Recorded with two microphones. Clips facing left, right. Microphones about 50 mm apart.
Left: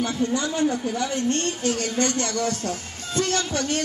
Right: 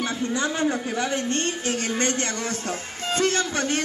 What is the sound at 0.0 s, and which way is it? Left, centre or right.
A man's voice, right.